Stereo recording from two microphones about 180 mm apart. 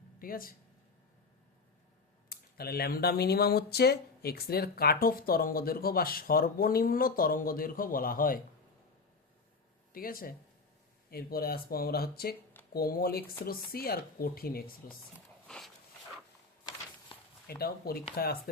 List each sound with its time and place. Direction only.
0.2 s speech: 55° left (ahead or behind)
2.3 s speech: 60° left (ahead or behind)
9.9 s speech: 55° left (ahead or behind)
15.4 s a sound: centre (ahead or behind)
17.6 s speech: 60° left (ahead or behind)